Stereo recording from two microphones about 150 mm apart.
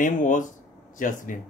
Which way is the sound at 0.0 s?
60° left (ahead or behind).